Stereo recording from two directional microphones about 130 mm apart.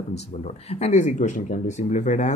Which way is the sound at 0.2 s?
55° left (ahead or behind).